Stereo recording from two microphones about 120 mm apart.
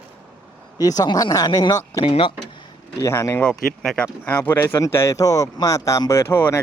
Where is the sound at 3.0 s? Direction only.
25° left (ahead or behind).